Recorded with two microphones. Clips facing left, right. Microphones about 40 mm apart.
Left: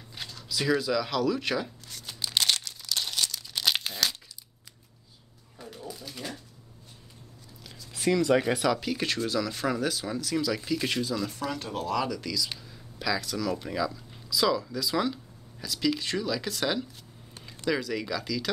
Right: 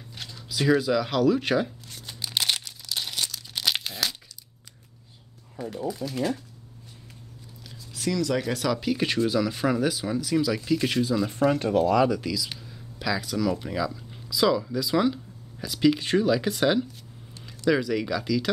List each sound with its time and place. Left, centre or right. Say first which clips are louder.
0.3 s speech: right 4 dB; centre
2.2 s crumpling: even; centre
5.9 s speech: right 11 dB; right
7.9 s speech: left 3 dB; left
8.7 s speech: right 5 dB; centre
11.2 s speech: right 10 dB; right
11.8 s speech: right 6 dB; centre
12.3 s speech: right 2 dB; centre
15.6 s speech: right 6 dB; centre